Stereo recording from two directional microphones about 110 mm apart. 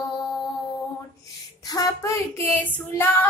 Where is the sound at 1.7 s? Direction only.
30° left (ahead or behind).